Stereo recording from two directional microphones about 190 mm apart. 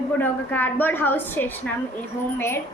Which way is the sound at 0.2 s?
10° left (ahead or behind).